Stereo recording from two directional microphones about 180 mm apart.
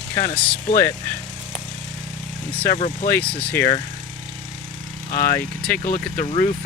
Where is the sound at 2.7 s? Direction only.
35° left (ahead or behind).